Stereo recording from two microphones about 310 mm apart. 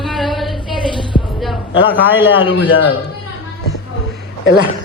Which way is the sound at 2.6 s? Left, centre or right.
Left.